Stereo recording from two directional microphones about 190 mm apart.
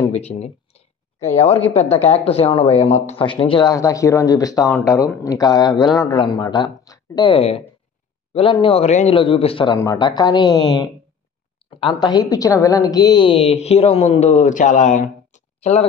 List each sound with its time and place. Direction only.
0.1 s a woman's voice: 35° left (ahead or behind)
12.0 s a woman's voice: 20° left (ahead or behind); by 15.8 s 40° left (ahead or behind)